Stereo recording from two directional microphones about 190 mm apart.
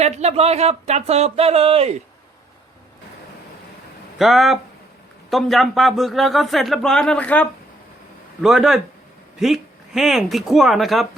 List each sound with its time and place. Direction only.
0.0 s speech: 35° right (ahead or behind)
4.2 s speech: centre (ahead or behind)